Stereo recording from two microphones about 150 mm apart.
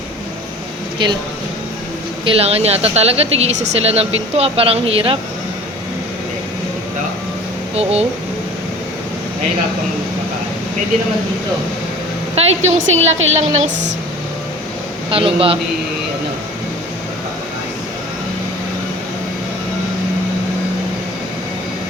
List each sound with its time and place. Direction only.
1.0 s a man's voice: 30° right (ahead or behind)
2.2 s speech: 45° right (ahead or behind)
7.8 s speech: 45° right (ahead or behind)
12.4 s speech: 45° right (ahead or behind)
15.1 s a man's voice: 40° right (ahead or behind)